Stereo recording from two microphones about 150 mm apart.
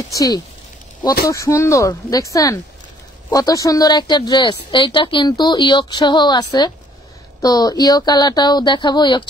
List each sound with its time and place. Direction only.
0.1 s speech: 25° left (ahead or behind)